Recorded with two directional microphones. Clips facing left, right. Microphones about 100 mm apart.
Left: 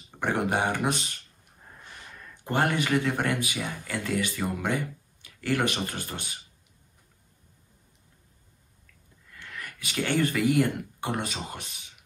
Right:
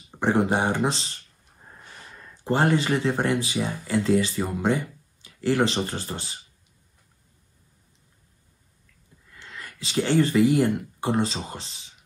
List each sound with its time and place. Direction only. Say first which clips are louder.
0.2 s speech: right 4 dB; 25° right (ahead or behind)
2.4 s speech: right 4 dB; 25° right (ahead or behind)
9.3 s speech: even; 20° right (ahead or behind)